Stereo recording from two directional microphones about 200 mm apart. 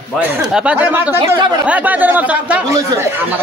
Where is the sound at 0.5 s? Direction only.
5° right (ahead or behind).